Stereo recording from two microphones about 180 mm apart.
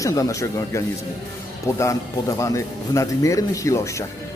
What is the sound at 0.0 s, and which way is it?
Speech, 20° left (ahead or behind).